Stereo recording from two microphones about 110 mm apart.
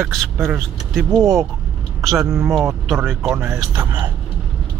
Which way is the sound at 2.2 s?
25° right (ahead or behind).